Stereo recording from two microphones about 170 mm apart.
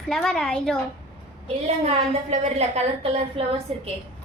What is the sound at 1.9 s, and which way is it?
A woman's voice, 40° right (ahead or behind).